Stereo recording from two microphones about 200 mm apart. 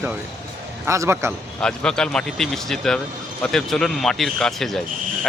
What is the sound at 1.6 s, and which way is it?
Speech, 5° left (ahead or behind).